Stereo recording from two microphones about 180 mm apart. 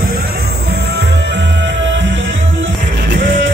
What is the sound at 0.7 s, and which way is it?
Music, 65° right (ahead or behind).